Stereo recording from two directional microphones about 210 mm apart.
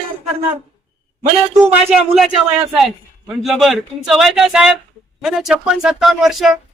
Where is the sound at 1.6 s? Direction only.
5° right (ahead or behind).